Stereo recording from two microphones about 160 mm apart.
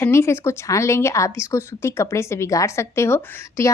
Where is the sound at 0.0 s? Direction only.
15° left (ahead or behind).